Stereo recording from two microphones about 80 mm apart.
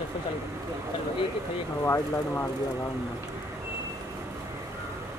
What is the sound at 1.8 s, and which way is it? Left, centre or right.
Speech, left.